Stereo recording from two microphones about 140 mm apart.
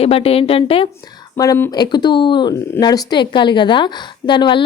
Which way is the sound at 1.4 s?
20° left (ahead or behind).